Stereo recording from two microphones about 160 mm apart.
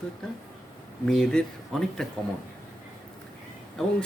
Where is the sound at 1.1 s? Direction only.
5° left (ahead or behind).